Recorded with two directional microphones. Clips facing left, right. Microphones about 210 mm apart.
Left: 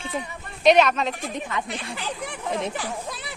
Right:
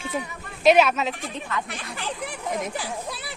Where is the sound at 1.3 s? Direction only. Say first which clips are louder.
Left 2 dB; 20° left (ahead or behind).